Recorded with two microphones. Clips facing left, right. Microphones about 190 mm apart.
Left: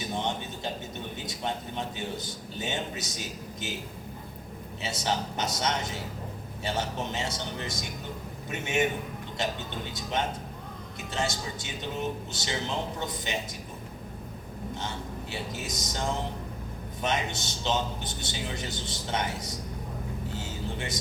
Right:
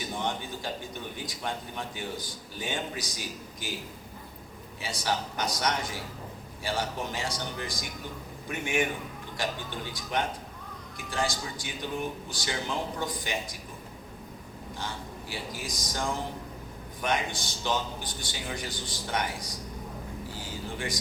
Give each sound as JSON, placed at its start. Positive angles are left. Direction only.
{"t": 0.0, "sound": "a sound", "side_deg": 20}
{"t": 1.1, "sound": "a man's voice", "side_deg": 25}
{"t": 4.8, "sound": "a man's voice", "side_deg": 25}
{"t": 14.8, "sound": "a man's voice", "side_deg": 20}
{"t": 20.3, "sound": "music", "side_deg": 25}